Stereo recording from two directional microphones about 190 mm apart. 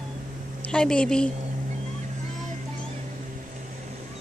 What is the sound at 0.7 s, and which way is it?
Speech, 5° left (ahead or behind).